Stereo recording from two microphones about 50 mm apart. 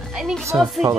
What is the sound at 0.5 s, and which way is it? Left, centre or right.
Speech, right.